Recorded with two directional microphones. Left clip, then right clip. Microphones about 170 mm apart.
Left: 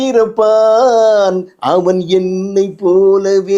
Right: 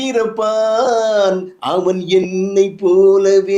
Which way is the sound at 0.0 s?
65° left (ahead or behind).